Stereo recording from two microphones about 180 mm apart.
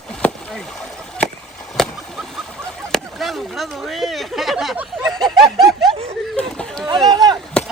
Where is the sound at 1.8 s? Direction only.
Centre (ahead or behind).